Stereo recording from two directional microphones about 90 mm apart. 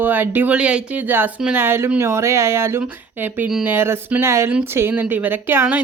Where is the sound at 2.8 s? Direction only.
20° right (ahead or behind).